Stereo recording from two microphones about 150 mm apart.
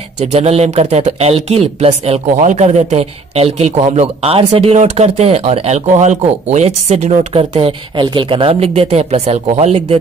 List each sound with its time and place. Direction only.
0.2 s speech: 45° right (ahead or behind)
7.5 s speech: 35° right (ahead or behind)